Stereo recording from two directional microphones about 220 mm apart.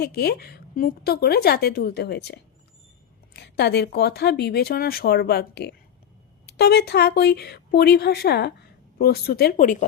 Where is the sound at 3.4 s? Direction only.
50° left (ahead or behind).